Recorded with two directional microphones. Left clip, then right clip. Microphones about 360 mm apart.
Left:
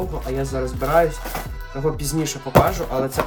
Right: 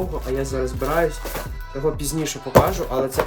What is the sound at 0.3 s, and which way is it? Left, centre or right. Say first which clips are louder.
Speech: right 1 dB; centre.